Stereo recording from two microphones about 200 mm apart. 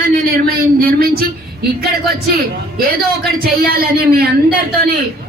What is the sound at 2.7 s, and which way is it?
Speech, 50° right (ahead or behind).